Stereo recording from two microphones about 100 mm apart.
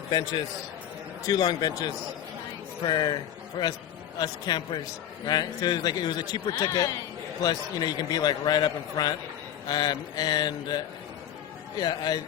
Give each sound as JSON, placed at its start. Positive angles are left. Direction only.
{"t": 0.1, "sound": "a man's voice", "side_deg": 45}